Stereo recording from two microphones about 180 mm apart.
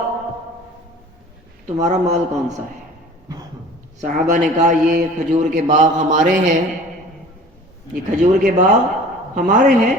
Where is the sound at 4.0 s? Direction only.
45° right (ahead or behind).